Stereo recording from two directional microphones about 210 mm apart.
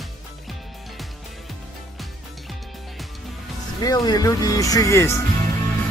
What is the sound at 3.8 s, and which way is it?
Speech, 20° left (ahead or behind).